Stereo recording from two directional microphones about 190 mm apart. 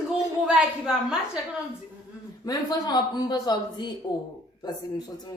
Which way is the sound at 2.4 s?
20° left (ahead or behind).